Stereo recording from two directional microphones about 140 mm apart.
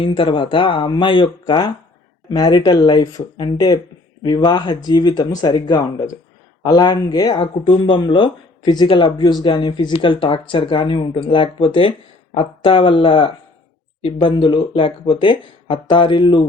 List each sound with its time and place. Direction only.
0.0 s speech: 35° left (ahead or behind)